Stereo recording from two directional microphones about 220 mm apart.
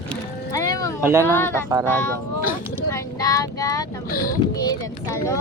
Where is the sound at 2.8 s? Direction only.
15° left (ahead or behind).